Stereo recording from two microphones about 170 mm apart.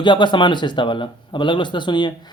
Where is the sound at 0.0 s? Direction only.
25° left (ahead or behind).